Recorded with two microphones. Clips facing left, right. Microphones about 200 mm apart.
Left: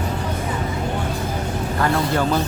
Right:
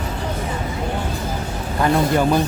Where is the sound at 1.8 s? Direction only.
15° right (ahead or behind).